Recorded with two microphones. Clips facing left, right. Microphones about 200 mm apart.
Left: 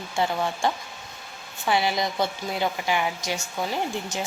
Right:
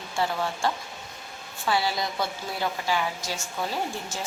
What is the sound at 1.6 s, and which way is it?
A woman's voice, 20° left (ahead or behind).